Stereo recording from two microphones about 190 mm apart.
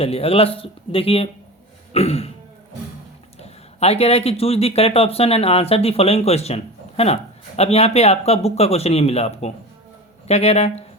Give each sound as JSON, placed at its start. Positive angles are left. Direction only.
{"t": 0.0, "sound": "speech", "side_deg": 30}
{"t": 1.9, "sound": "throat clearing", "side_deg": 30}
{"t": 3.4, "sound": "speech", "side_deg": 35}